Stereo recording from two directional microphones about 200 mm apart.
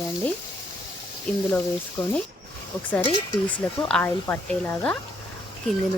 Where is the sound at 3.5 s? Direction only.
5° left (ahead or behind).